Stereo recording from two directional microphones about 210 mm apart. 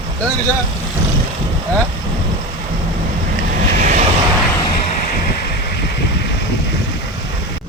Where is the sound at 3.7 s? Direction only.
35° right (ahead or behind).